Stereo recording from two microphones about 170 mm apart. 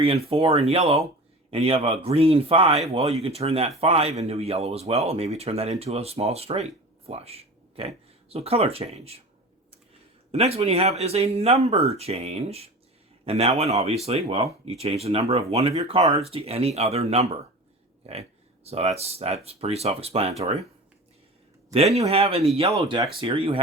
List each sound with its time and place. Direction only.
0.3 s speech: 35° right (ahead or behind)
10.3 s speech: 35° right (ahead or behind)
21.7 s speech: 40° right (ahead or behind)
22.8 s speech: 20° right (ahead or behind)
23.2 s speech: 35° right (ahead or behind)